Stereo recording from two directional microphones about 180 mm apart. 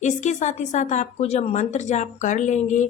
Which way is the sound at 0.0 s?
40° left (ahead or behind).